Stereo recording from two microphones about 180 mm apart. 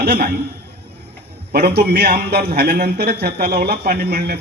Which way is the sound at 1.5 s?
60° right (ahead or behind).